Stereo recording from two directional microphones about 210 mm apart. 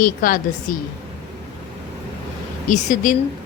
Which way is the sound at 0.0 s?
40° left (ahead or behind).